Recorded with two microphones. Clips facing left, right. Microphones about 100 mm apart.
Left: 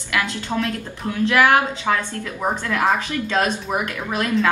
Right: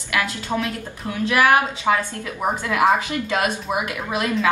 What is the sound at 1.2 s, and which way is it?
A woman's voice, 15° right (ahead or behind).